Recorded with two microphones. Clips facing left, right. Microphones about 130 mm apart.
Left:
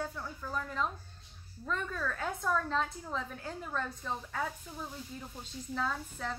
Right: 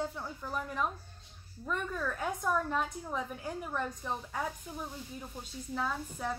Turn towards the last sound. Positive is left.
turn(degrees=-10)  # may be behind; listen again after turning